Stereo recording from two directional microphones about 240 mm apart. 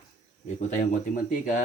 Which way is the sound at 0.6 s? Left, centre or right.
Left.